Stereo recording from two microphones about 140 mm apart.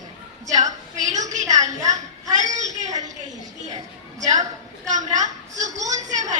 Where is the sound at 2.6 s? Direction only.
60° right (ahead or behind).